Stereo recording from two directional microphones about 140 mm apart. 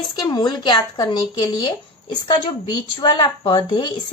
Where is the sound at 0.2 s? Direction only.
30° left (ahead or behind).